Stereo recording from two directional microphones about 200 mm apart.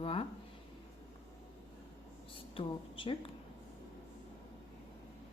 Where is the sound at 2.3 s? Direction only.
25° left (ahead or behind).